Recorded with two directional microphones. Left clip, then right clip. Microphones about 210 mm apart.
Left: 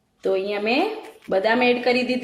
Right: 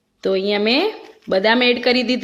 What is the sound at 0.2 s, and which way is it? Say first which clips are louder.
A woman's voice: right 4 dB; 45° right (ahead or behind).